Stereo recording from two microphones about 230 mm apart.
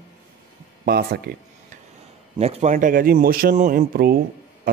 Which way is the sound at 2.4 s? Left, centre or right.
Right.